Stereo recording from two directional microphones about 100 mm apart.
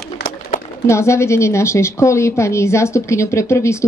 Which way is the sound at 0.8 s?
30° left (ahead or behind).